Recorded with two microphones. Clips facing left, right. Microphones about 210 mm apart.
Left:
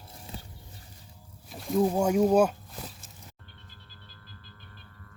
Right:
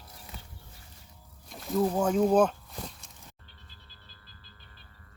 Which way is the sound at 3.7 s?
50° left (ahead or behind).